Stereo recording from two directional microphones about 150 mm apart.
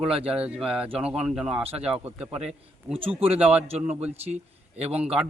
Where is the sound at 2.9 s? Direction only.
40° right (ahead or behind).